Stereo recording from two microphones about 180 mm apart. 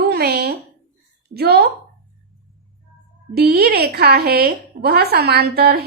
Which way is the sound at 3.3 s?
60° right (ahead or behind).